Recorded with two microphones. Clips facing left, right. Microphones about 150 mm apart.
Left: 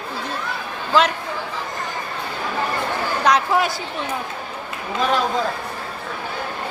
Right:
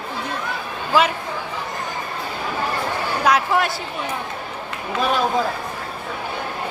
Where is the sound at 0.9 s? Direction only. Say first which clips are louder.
Even; 10° right (ahead or behind).